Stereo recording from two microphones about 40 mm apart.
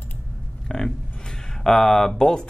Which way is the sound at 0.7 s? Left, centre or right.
Centre.